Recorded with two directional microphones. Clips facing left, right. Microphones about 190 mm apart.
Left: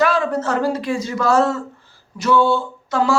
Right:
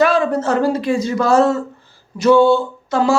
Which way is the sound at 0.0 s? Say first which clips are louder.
Right 3 dB; 20° right (ahead or behind).